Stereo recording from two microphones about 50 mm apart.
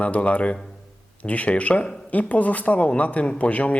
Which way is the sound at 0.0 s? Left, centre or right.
Left.